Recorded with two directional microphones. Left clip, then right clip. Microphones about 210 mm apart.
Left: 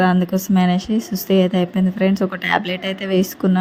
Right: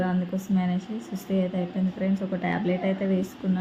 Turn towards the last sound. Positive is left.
turn(degrees=45)  # may be behind; listen again after turning